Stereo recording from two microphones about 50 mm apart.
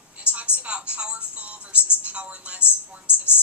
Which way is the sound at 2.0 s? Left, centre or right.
Right.